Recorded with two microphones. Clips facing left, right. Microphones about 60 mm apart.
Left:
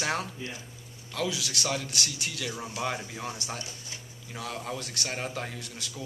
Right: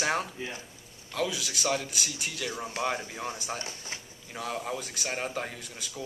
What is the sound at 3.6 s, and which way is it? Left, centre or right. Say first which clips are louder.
Speech: right 3 dB; right.